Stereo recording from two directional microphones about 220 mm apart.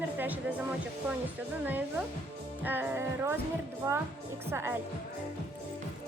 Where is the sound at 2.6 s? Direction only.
10° right (ahead or behind).